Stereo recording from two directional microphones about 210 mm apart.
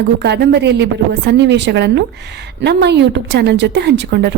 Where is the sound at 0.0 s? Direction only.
55° right (ahead or behind).